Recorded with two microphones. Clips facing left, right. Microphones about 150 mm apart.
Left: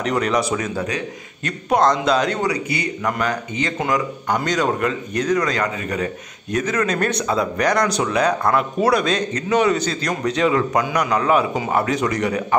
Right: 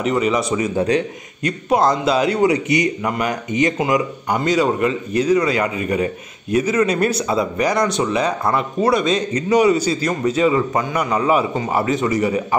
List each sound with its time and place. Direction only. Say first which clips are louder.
0.0 s speech: right 2 dB; 5° right (ahead or behind)
0.7 s speech: right 7 dB; 30° right (ahead or behind)
1.4 s speech: right 1 dB; 5° right (ahead or behind)
2.4 s speech: right 6 dB; 20° right (ahead or behind); by 12.4 s 5° right (ahead or behind)